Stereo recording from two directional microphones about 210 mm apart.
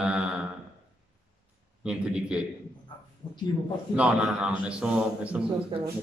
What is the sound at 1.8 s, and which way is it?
Speech, 5° right (ahead or behind).